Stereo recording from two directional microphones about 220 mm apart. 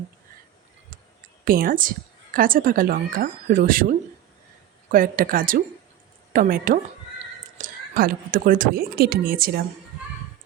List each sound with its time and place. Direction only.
1.5 s a woman's voice: 40° right (ahead or behind)